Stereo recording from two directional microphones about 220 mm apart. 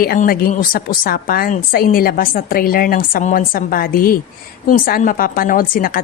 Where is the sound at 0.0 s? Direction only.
40° left (ahead or behind).